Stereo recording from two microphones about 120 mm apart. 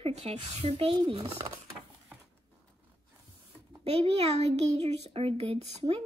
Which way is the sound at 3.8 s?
55° right (ahead or behind).